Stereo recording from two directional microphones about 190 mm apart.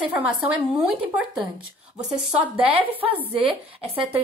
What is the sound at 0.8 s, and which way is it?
Speech, 5° right (ahead or behind).